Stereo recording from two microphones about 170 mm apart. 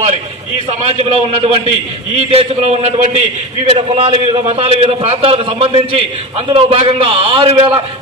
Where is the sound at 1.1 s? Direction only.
35° right (ahead or behind).